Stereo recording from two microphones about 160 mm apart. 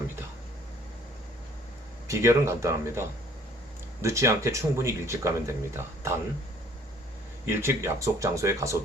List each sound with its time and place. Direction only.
2.0 s speech: 20° right (ahead or behind)
7.4 s speech: 15° right (ahead or behind)